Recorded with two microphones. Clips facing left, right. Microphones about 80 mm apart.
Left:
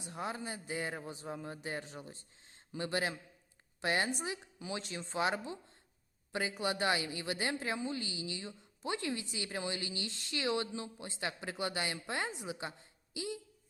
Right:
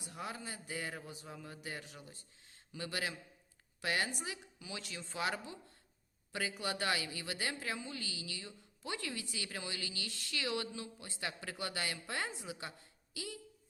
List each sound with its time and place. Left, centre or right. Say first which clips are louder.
0.0 s a woman's voice: left 4 dB; left